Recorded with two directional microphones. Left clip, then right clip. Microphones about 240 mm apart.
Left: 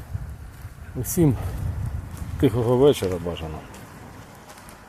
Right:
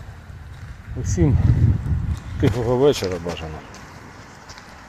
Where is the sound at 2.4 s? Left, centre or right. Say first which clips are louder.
Even; centre.